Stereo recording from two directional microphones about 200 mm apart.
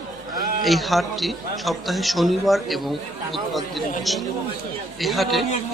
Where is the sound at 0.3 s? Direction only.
45° right (ahead or behind).